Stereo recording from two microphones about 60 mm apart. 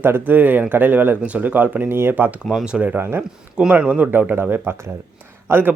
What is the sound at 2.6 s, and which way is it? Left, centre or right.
Speech, right.